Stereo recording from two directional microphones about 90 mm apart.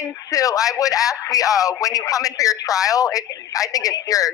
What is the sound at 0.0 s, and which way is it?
Speech, 40° left (ahead or behind).